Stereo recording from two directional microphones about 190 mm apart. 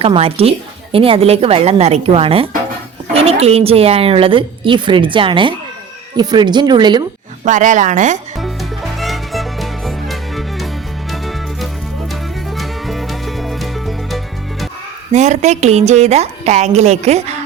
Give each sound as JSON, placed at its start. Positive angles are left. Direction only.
{"t": 0.0, "sound": "a woman's voice", "side_deg": -30}
{"t": 7.4, "sound": "a woman's voice", "side_deg": -40}
{"t": 8.4, "sound": "music", "side_deg": 0}
{"t": 15.1, "sound": "a woman's voice", "side_deg": -40}